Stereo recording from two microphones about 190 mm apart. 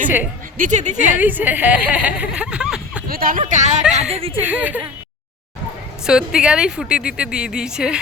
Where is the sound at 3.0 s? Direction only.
50° right (ahead or behind); by 4.3 s 30° right (ahead or behind).